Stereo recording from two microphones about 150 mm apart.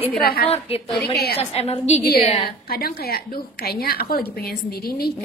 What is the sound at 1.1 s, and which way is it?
Speech, 90° left.